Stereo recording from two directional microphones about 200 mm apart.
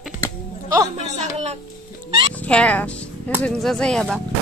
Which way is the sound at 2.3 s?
5° left (ahead or behind).